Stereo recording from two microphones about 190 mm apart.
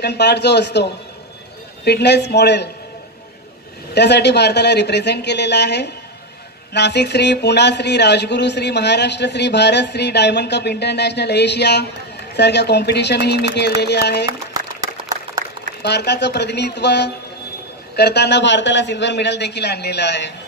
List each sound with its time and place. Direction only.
0.0 s a man's voice: 60° left (ahead or behind)
1.9 s a man's voice: 60° left (ahead or behind)
3.9 s a man's voice: 60° left (ahead or behind)
15.8 s a man's voice: 60° left (ahead or behind)